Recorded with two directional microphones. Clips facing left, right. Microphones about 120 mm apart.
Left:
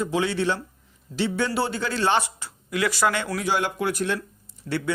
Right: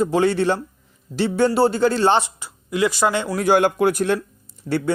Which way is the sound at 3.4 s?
50° right (ahead or behind).